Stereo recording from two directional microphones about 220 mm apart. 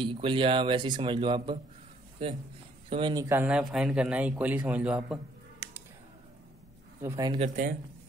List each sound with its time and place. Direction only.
0.0 s speech: 20° right (ahead or behind)
2.9 s speech: 20° right (ahead or behind); by 5.2 s 5° right (ahead or behind)
7.0 s speech: 15° right (ahead or behind)
7.3 s speech: 35° right (ahead or behind)